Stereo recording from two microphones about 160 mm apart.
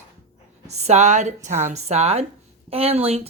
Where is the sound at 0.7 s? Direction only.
45° right (ahead or behind).